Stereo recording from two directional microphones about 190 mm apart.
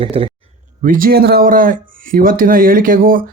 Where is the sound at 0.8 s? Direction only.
45° right (ahead or behind).